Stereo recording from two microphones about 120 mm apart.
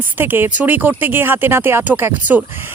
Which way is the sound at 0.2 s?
15° right (ahead or behind).